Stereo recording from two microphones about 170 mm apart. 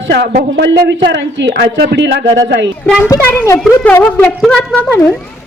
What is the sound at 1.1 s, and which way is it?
A woman's voice, 90° right.